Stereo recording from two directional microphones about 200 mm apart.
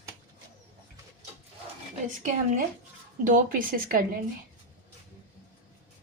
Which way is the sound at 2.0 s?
40° right (ahead or behind).